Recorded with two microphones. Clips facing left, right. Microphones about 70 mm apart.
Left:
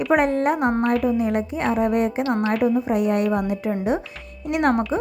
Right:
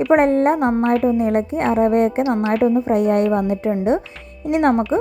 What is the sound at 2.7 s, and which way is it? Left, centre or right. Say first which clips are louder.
Speech: right 4 dB; right.